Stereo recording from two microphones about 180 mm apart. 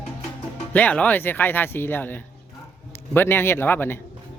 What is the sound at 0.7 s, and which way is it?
Speech, 10° left (ahead or behind).